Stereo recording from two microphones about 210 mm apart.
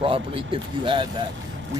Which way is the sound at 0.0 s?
25° right (ahead or behind).